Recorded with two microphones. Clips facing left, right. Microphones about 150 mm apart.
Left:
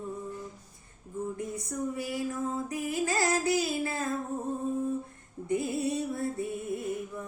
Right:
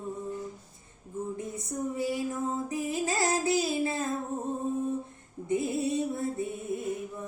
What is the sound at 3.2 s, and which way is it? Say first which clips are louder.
Child singing: right 2 dB; 25° right (ahead or behind).